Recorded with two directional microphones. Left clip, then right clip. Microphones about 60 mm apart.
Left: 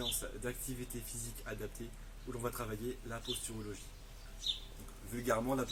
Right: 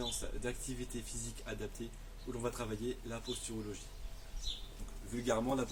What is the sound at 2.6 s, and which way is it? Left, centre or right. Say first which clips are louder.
Speech: right 1 dB; centre.